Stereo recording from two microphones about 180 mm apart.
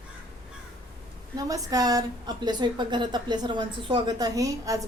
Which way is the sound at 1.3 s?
20° right (ahead or behind).